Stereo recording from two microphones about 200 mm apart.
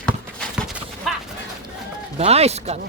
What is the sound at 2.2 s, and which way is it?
Speech, 30° right (ahead or behind).